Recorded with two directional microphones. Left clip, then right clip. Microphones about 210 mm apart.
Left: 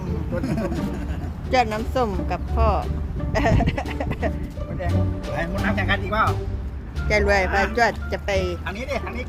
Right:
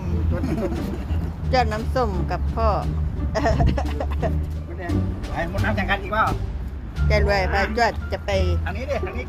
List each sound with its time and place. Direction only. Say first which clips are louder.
0.4 s speech: right 2 dB; 30° left (ahead or behind)
1.5 s speech: left 1 dB; 10° left (ahead or behind)
3.3 s music: even; 5° left (ahead or behind)
5.4 s speech: right 1 dB; 20° left (ahead or behind)
8.6 s speech: right 1 dB; 40° left (ahead or behind)